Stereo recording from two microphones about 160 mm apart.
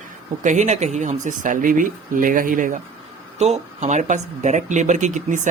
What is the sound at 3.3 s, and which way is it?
Speech, 45° right (ahead or behind).